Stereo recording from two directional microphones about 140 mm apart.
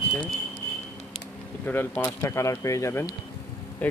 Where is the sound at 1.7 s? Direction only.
15° left (ahead or behind).